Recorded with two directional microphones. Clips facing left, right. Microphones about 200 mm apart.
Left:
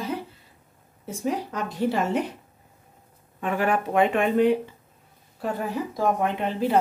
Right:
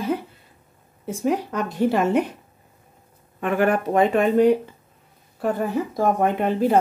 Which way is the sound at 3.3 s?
55° right (ahead or behind).